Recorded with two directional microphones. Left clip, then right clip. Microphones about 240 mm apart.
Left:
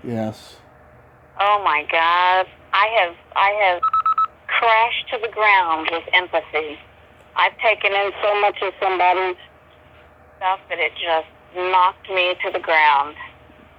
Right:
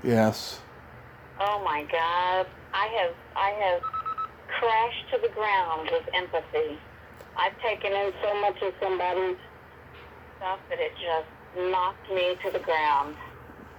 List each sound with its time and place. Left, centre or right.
0.0 s speech: centre
1.4 s a woman's voice: centre
10.4 s a woman's voice: centre